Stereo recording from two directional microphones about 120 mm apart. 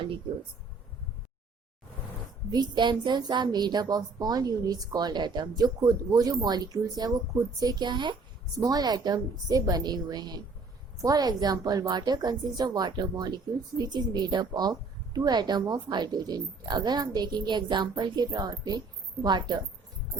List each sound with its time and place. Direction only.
2.5 s a woman's voice: 35° right (ahead or behind)